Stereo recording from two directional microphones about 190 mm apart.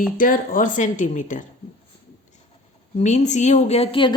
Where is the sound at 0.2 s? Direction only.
45° left (ahead or behind).